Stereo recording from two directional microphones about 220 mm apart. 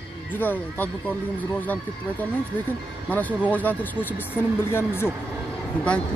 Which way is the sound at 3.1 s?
5° left (ahead or behind).